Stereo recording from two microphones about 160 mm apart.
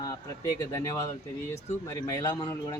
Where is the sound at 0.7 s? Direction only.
20° left (ahead or behind).